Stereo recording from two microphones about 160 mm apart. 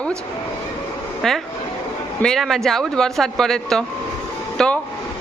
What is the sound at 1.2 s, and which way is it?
Speech, 5° left (ahead or behind).